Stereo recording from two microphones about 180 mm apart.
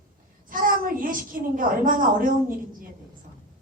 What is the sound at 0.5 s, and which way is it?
A woman's voice, 50° right (ahead or behind).